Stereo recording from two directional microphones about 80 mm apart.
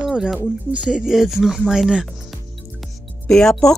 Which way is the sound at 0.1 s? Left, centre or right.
Centre.